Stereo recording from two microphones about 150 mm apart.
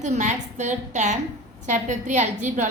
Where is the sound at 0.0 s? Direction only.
50° right (ahead or behind).